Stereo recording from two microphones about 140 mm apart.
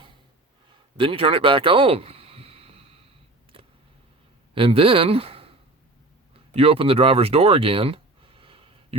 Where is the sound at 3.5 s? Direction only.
40° right (ahead or behind).